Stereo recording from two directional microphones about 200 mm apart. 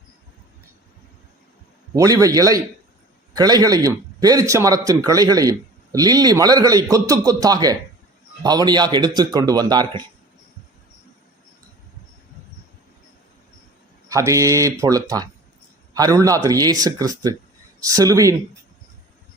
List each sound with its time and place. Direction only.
2.0 s speech: 15° right (ahead or behind)
14.1 s speech: 15° right (ahead or behind)